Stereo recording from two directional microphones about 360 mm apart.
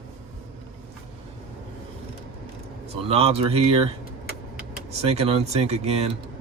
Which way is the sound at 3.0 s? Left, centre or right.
Centre.